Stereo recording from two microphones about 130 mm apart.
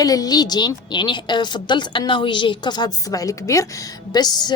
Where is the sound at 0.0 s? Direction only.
30° left (ahead or behind).